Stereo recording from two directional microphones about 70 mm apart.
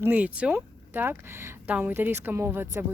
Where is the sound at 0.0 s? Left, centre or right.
Right.